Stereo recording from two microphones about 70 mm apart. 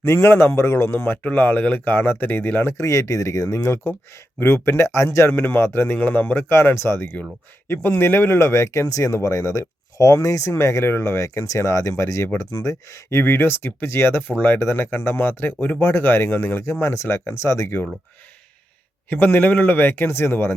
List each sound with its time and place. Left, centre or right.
0.0 s speech: left
2.7 s speech: left
4.4 s speech: left
14.2 s speech: left
19.1 s speech: left